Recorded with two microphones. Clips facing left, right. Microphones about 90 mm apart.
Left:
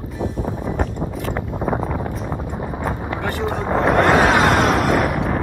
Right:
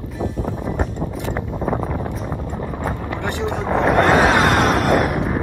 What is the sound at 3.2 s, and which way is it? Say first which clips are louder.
Vehicle: even; 20° right (ahead or behind).